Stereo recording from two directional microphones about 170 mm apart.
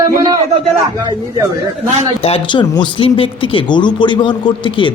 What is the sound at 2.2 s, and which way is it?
Speech, 30° left (ahead or behind).